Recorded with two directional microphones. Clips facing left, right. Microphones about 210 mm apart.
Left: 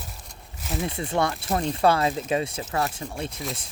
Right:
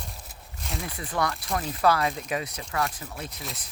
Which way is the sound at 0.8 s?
25° left (ahead or behind).